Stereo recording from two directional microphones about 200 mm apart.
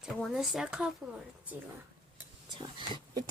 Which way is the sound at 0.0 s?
Centre (ahead or behind).